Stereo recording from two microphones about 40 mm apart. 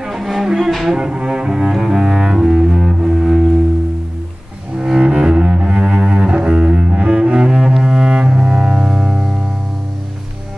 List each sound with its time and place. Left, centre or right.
0.0 s music: centre
0.8 s cello: centre
1.7 s double bass: centre
4.7 s cello: centre